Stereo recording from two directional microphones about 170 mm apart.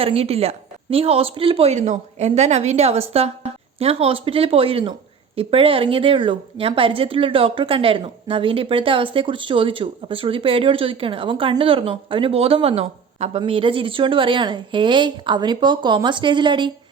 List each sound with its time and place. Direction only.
0.0 s a woman's voice: 35° right (ahead or behind)